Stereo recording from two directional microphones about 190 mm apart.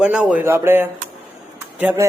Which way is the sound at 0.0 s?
5° right (ahead or behind).